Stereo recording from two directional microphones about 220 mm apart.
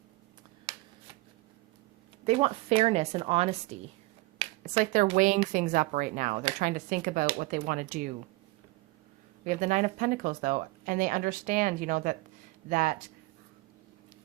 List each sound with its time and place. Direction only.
2.2 s speech: 25° right (ahead or behind)
9.4 s speech: 35° right (ahead or behind)